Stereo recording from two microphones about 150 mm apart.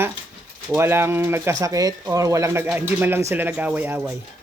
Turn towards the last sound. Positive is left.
turn(degrees=-10)  # may be behind; listen again after turning